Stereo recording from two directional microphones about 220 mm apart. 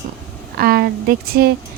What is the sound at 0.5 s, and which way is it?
Speech, 45° right (ahead or behind).